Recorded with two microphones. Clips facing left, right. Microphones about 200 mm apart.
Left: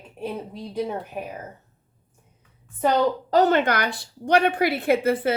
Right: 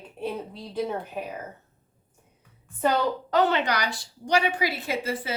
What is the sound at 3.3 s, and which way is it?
A woman's voice, 45° left (ahead or behind).